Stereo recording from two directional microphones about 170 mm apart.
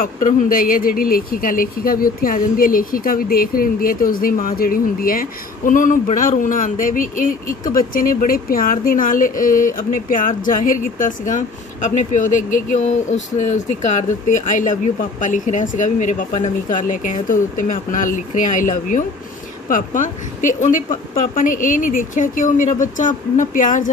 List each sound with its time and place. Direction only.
0.0 s speech: 55° left (ahead or behind)